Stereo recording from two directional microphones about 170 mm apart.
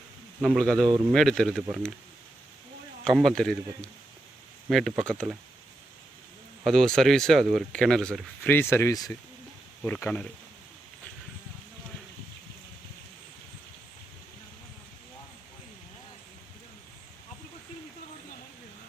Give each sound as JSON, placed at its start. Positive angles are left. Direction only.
{"t": 0.4, "sound": "speech", "side_deg": 0}
{"t": 3.0, "sound": "speech", "side_deg": 0}
{"t": 6.7, "sound": "speech", "side_deg": 5}
{"t": 8.4, "sound": "speech", "side_deg": 15}
{"t": 9.8, "sound": "speech", "side_deg": 10}